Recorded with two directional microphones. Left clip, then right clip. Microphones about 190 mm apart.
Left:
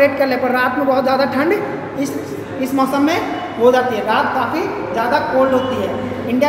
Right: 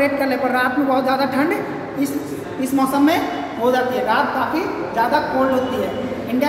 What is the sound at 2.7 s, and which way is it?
A woman's voice, 5° left (ahead or behind).